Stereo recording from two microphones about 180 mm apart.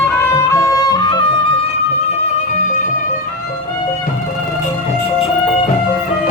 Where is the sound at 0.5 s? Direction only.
20° left (ahead or behind).